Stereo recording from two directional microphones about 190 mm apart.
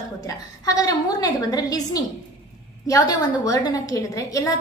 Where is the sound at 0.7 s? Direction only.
20° left (ahead or behind).